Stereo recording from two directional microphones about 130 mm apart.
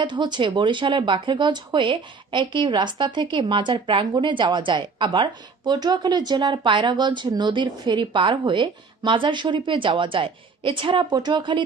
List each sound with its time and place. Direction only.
0.0 s speech: 35° right (ahead or behind)